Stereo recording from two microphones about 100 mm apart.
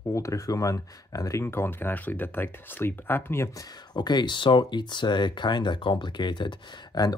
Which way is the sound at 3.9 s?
45° left (ahead or behind).